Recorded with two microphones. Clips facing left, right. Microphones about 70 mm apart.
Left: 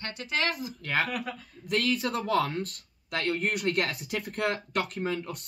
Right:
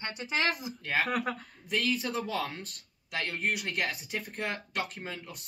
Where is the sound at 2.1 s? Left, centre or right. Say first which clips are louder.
Left 6 dB; left.